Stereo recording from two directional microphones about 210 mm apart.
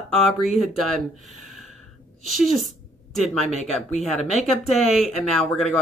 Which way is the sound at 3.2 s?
Centre (ahead or behind).